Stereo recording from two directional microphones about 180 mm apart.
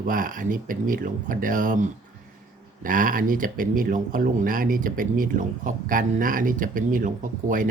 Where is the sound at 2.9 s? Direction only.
50° right (ahead or behind).